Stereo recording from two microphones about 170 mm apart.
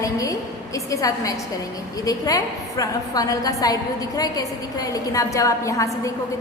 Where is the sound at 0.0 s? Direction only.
20° left (ahead or behind).